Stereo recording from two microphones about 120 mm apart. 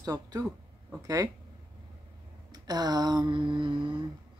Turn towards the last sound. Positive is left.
turn(degrees=-40)  # may be behind; listen again after turning